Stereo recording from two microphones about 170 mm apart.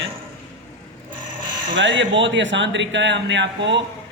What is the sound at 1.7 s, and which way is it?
Speech, 90° right.